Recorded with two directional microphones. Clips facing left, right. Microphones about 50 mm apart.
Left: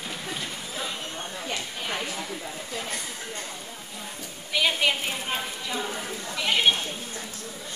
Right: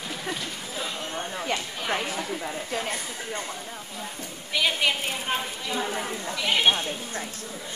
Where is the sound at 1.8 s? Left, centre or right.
Right.